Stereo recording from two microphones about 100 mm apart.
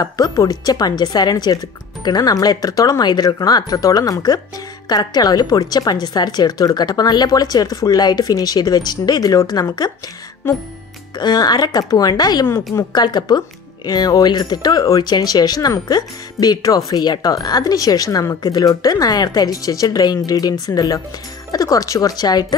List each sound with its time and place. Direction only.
0.0 s speech: 40° left (ahead or behind)
11.1 s speech: 45° left (ahead or behind)